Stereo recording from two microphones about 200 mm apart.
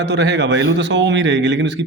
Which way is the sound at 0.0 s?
60° right (ahead or behind).